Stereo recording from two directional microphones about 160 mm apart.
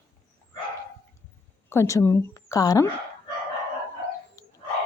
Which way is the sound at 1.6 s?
20° left (ahead or behind).